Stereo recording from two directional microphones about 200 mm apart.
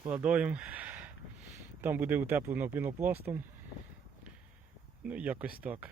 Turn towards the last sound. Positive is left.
turn(degrees=-10)  # may be behind; listen again after turning